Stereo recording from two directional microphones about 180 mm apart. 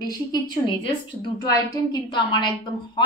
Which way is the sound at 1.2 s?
20° left (ahead or behind).